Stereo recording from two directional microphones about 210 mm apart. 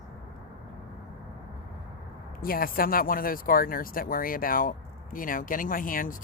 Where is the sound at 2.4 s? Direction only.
45° left (ahead or behind).